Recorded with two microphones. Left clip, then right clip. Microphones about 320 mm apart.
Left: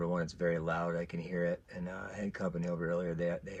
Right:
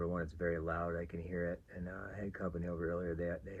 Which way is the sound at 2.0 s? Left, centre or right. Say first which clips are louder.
Left 4 dB; right.